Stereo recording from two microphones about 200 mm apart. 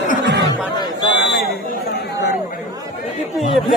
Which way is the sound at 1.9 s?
55° left (ahead or behind).